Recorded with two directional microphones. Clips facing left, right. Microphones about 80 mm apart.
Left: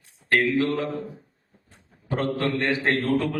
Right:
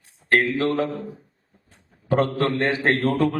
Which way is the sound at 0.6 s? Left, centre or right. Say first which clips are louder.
Right 4 dB; right.